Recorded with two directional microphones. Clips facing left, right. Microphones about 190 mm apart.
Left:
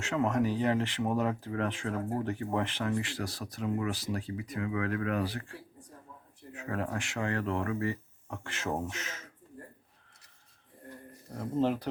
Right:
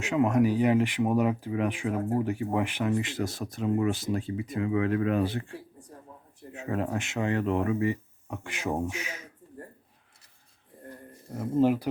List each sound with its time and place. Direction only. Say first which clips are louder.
0.0 s speech: right 5 dB; 15° right (ahead or behind)
11.3 s speech: right 5 dB; 5° right (ahead or behind)